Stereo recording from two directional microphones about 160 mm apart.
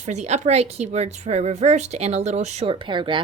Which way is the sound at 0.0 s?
45° right (ahead or behind).